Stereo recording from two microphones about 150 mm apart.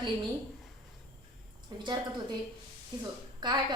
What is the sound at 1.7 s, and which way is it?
Speech, 30° right (ahead or behind).